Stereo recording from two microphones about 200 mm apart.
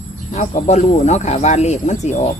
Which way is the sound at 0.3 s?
35° left (ahead or behind).